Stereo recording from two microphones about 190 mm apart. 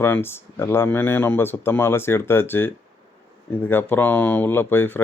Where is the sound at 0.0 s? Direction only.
10° left (ahead or behind).